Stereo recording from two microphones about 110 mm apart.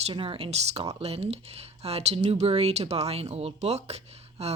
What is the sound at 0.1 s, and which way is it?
Speech, 55° right (ahead or behind).